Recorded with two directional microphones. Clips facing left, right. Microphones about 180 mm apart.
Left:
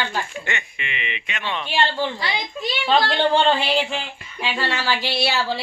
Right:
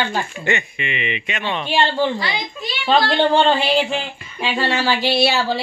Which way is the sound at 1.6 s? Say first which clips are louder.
Right 4 dB; 20° right (ahead or behind).